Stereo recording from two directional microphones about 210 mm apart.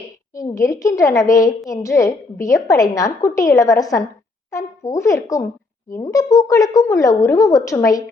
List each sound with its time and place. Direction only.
0.3 s a woman's voice: 15° left (ahead or behind)